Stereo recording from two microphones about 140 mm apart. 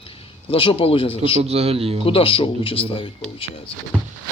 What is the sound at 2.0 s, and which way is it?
Speech, 40° left (ahead or behind).